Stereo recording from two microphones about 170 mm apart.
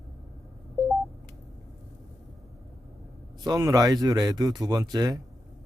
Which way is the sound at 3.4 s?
20° right (ahead or behind).